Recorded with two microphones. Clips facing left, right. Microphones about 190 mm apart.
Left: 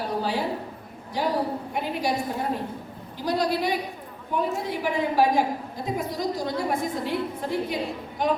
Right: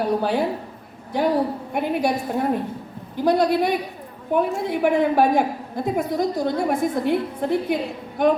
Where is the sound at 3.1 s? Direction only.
55° right (ahead or behind).